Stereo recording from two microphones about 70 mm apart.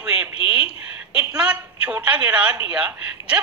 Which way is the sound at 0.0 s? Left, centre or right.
Centre.